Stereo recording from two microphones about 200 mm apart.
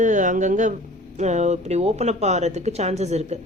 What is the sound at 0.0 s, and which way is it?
Speech, 40° right (ahead or behind).